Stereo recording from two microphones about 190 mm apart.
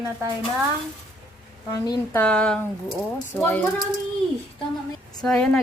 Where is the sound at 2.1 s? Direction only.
5° left (ahead or behind).